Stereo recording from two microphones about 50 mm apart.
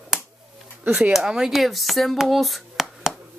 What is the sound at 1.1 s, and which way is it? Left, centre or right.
Speech, centre.